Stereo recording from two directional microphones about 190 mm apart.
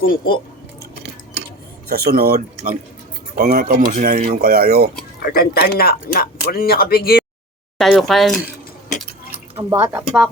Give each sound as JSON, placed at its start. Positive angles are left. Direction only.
{"t": 0.0, "sound": "speech", "side_deg": 50}
{"t": 1.9, "sound": "speech", "side_deg": -55}
{"t": 5.2, "sound": "speech", "side_deg": 50}
{"t": 7.8, "sound": "speech", "side_deg": 0}
{"t": 9.8, "sound": "speech", "side_deg": -5}